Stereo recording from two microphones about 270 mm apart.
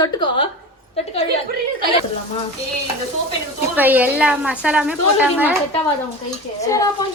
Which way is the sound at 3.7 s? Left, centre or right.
Centre.